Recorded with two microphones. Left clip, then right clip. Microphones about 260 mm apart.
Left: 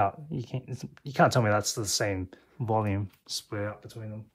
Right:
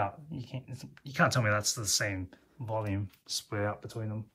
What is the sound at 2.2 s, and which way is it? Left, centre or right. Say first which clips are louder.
Speech: left 8 dB; left.